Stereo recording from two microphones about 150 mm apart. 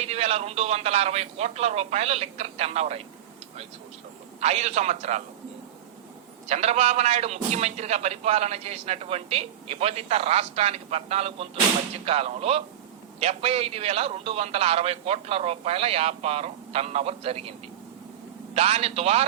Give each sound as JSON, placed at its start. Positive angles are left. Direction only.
{"t": 0.0, "sound": "a man's voice", "side_deg": -45}
{"t": 4.4, "sound": "a man's voice", "side_deg": -45}
{"t": 6.5, "sound": "a man's voice", "side_deg": -45}
{"t": 18.5, "sound": "a man's voice", "side_deg": -40}